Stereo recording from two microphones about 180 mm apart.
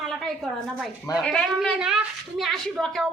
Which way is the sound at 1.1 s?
Centre (ahead or behind).